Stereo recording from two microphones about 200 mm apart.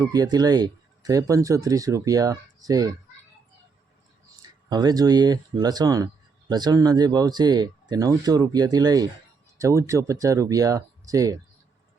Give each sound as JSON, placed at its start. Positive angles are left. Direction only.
{"t": 0.0, "sound": "speech", "side_deg": -20}
{"t": 4.4, "sound": "speech", "side_deg": -20}